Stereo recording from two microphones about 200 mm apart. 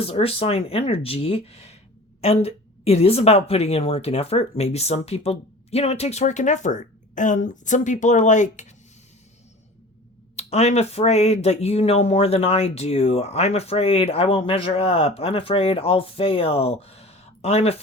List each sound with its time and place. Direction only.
0.0 s speech: 30° left (ahead or behind)
10.3 s speech: 35° left (ahead or behind)